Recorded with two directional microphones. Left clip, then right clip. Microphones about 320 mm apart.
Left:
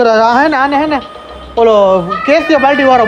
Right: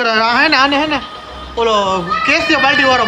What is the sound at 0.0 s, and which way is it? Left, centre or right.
Speech, centre.